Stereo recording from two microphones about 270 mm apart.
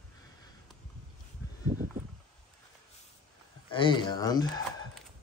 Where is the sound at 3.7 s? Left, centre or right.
Centre.